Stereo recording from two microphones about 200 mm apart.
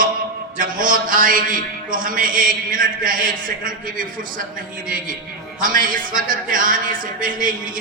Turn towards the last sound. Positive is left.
turn(degrees=-45)  # may be behind; listen again after turning